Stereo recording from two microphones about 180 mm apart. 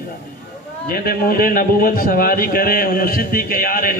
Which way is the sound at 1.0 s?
55° left (ahead or behind).